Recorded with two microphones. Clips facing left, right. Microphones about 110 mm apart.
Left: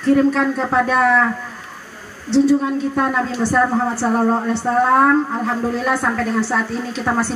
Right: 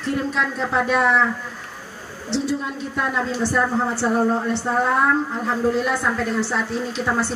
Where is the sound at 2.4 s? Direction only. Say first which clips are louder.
Left 9 dB; 45° left (ahead or behind).